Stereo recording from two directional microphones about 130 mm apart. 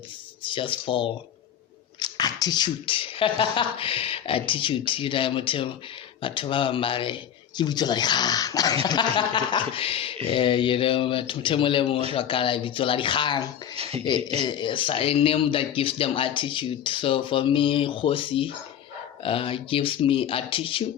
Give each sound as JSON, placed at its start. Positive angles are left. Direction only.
{"t": 0.4, "sound": "speech", "side_deg": 40}
{"t": 2.0, "sound": "speech", "side_deg": 30}
{"t": 13.7, "sound": "speech", "side_deg": -50}
{"t": 14.3, "sound": "speech", "side_deg": 35}